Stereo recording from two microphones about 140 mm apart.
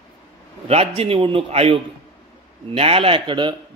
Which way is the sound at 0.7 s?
45° right (ahead or behind).